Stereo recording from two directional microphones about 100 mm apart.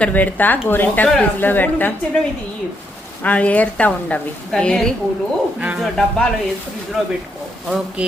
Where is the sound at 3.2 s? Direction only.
15° left (ahead or behind); by 7.1 s 5° right (ahead or behind).